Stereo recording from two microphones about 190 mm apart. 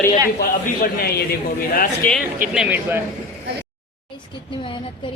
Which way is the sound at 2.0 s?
10° left (ahead or behind).